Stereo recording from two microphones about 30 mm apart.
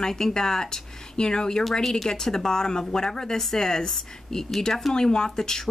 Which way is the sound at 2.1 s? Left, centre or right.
Centre.